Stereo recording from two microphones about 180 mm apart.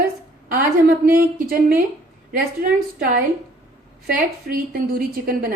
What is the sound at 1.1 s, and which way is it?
A woman's voice, 50° right (ahead or behind).